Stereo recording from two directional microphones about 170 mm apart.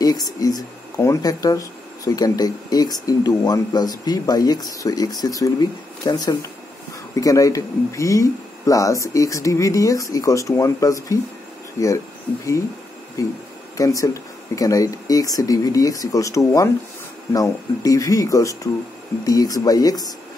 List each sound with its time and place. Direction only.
0.0 s speech: 20° left (ahead or behind)
13.2 s speech: 20° left (ahead or behind)